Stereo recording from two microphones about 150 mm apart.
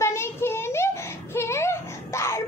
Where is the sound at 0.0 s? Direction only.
15° left (ahead or behind).